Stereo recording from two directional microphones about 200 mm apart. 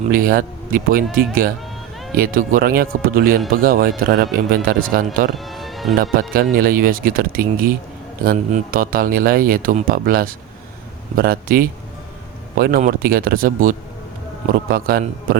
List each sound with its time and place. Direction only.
0.1 s speech: 45° right (ahead or behind)
5.4 s music: centre (ahead or behind)
6.3 s speech: 45° right (ahead or behind)